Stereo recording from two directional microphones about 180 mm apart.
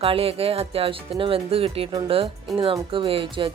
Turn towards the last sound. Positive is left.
turn(degrees=-30)  # may be behind; listen again after turning